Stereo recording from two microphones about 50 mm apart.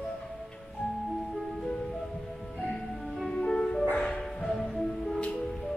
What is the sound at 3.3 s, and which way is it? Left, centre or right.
Music, centre.